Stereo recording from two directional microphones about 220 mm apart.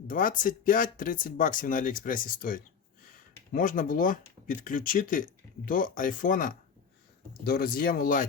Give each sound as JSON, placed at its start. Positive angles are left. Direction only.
{"t": 0.1, "sound": "speech", "side_deg": 40}